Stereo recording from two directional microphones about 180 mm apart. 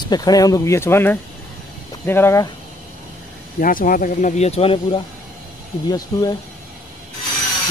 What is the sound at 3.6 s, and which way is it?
Speech, 50° left (ahead or behind).